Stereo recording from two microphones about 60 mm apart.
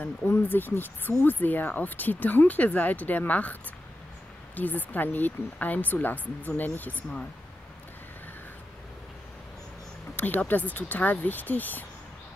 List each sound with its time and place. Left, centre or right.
0.3 s speech: left
4.6 s speech: left
10.1 s speech: left